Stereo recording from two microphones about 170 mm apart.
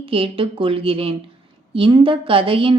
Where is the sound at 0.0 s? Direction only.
30° right (ahead or behind).